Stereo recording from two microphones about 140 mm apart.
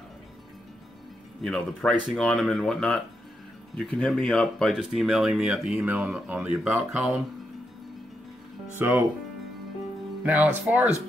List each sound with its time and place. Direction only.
1.4 s speech: 5° left (ahead or behind)
8.7 s speech: 15° right (ahead or behind)
10.2 s speech: 10° right (ahead or behind)